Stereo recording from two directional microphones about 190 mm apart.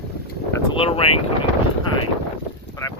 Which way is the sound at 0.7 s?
30° left (ahead or behind).